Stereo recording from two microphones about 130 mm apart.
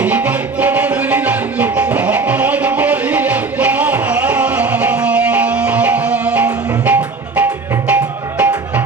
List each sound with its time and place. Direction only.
0.0 s music: 10° right (ahead or behind)